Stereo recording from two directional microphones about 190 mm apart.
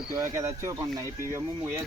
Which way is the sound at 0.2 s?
15° right (ahead or behind).